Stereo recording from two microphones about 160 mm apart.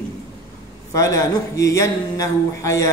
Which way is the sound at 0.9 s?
20° left (ahead or behind).